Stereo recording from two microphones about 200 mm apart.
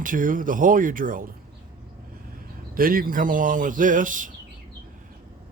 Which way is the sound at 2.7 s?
45° right (ahead or behind).